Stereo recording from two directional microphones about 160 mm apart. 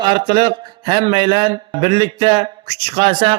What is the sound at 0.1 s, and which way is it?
A man's voice, 25° right (ahead or behind).